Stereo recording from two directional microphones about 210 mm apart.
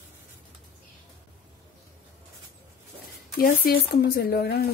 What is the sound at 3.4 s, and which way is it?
Speech, 45° left (ahead or behind).